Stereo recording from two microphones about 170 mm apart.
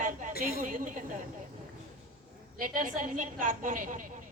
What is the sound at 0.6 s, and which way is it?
Speech, 50° right (ahead or behind).